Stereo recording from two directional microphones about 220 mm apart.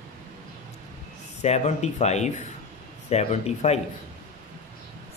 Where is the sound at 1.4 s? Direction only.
30° left (ahead or behind).